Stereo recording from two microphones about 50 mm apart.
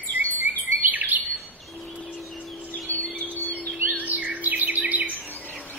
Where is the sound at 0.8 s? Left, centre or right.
Right.